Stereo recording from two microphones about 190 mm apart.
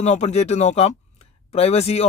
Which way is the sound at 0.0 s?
35° left (ahead or behind).